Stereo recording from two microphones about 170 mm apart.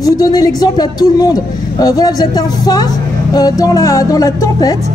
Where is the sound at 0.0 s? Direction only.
20° left (ahead or behind).